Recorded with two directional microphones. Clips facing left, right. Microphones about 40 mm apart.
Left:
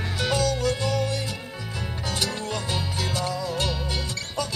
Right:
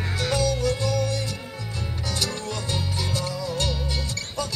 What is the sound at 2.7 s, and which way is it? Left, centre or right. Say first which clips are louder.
Music: even; left.